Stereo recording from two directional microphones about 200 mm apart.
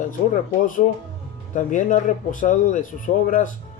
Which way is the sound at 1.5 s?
40° left (ahead or behind).